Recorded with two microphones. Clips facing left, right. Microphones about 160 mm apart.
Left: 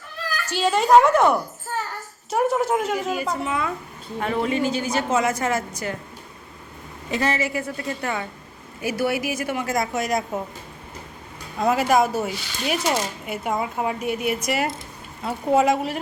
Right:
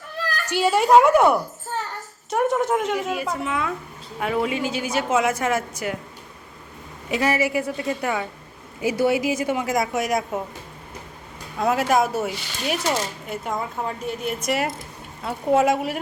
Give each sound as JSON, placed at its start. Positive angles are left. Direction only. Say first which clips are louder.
{"t": 0.4, "sound": "a woman's voice", "louder": "right 1 dB", "side_deg": -10}
{"t": 2.3, "sound": "a woman's voice", "louder": "even", "side_deg": 5}
{"t": 7.1, "sound": "a woman's voice", "louder": "right 2 dB", "side_deg": -10}
{"t": 8.8, "sound": "a woman's voice", "louder": "right 3 dB", "side_deg": -20}
{"t": 11.5, "sound": "a woman's voice", "louder": "left 1 dB", "side_deg": 0}
{"t": 12.8, "sound": "a woman's voice", "louder": "left 1 dB", "side_deg": 15}